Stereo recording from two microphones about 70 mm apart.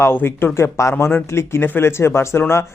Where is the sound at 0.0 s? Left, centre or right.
Left.